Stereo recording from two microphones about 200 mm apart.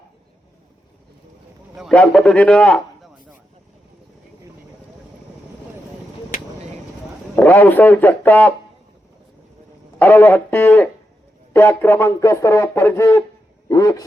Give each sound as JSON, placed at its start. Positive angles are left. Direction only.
{"t": 1.7, "sound": "a man's voice", "side_deg": 0}
{"t": 7.3, "sound": "speech", "side_deg": 10}
{"t": 10.0, "sound": "speech", "side_deg": 10}